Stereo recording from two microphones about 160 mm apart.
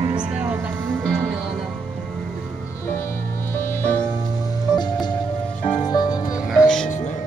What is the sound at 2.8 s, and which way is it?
Music, 15° left (ahead or behind).